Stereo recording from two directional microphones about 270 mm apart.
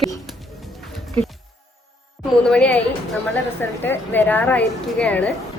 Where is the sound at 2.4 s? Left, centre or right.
Centre.